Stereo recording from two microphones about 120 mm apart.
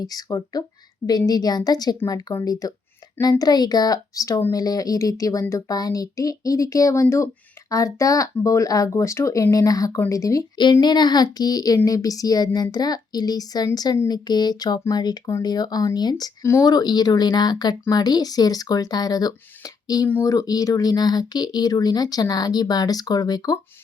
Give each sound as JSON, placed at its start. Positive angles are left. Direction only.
{"t": 0.0, "sound": "speech", "side_deg": 30}
{"t": 10.6, "sound": "speech", "side_deg": 40}